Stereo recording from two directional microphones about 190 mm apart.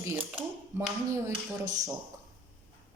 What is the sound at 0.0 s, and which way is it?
Speech, 10° right (ahead or behind).